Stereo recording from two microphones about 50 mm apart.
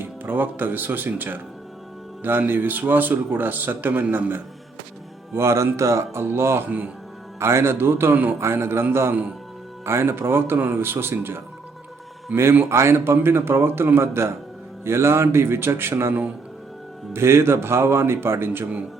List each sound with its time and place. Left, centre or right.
0.0 s speech: right
2.5 s a man's voice: right
5.3 s speech: right
6.2 s a man's voice: right
12.3 s a man's voice: right
12.6 s a man's voice: right